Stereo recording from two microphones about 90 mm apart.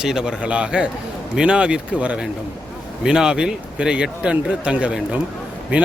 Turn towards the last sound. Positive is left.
turn(degrees=-15)  # may be behind; listen again after turning